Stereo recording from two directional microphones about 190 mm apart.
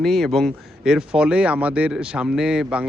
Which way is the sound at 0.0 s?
Centre (ahead or behind).